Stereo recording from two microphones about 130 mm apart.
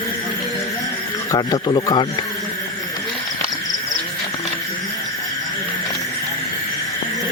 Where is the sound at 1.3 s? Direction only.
35° left (ahead or behind).